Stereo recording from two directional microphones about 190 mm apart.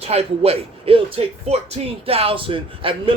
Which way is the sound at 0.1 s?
30° right (ahead or behind).